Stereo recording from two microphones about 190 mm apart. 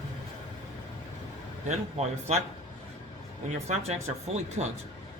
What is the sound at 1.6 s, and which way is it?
Speech, 35° right (ahead or behind).